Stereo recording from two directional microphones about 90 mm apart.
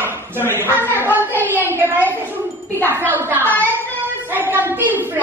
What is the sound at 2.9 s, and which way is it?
Speech, 25° right (ahead or behind).